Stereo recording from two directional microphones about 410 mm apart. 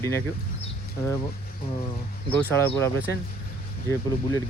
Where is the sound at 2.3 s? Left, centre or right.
Centre.